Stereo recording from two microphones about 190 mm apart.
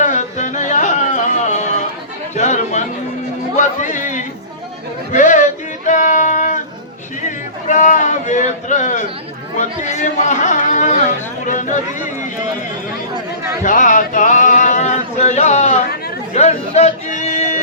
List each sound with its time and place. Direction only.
0.0 s music: 40° left (ahead or behind)
2.3 s chatter: 35° left (ahead or behind)
3.5 s speech: 40° left (ahead or behind)
5.1 s a sound: 40° left (ahead or behind)
7.3 s a man's voice: 40° left (ahead or behind)
13.5 s a sound: 45° left (ahead or behind)